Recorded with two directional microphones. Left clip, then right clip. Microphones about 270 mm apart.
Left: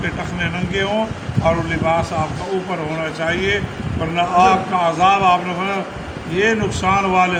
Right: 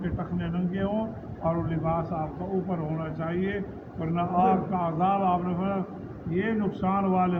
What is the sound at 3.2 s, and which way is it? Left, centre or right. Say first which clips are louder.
A man's voice: left 13 dB; centre.